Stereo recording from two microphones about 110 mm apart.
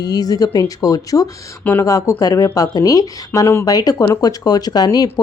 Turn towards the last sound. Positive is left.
turn(degrees=35)  # may be behind; listen again after turning